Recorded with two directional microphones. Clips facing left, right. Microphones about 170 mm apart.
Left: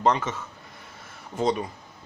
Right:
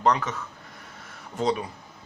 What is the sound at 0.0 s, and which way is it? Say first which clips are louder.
Speech: even; 25° left (ahead or behind).